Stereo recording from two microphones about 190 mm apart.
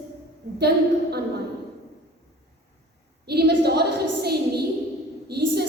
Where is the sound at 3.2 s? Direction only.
55° right (ahead or behind).